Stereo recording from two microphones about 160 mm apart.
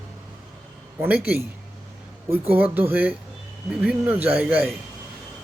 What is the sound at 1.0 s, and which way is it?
A man's voice, 10° right (ahead or behind).